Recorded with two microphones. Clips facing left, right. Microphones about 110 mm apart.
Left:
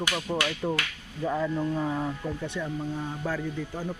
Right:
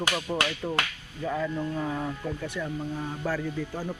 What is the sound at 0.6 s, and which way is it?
Speech, 15° left (ahead or behind).